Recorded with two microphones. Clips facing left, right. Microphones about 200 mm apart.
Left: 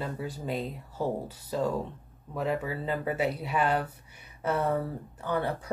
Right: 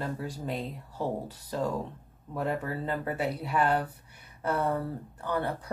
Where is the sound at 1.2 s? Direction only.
5° left (ahead or behind).